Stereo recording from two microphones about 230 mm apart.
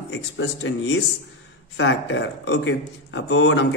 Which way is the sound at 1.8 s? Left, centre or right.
Left.